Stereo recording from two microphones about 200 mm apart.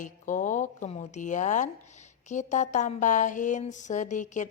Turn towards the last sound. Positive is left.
turn(degrees=40)  # may be behind; listen again after turning